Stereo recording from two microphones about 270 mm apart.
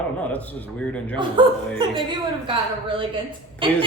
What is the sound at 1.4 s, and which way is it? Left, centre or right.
A woman's voice, centre.